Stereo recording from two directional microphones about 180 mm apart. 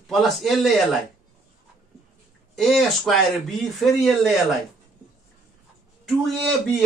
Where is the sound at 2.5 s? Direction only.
Centre (ahead or behind).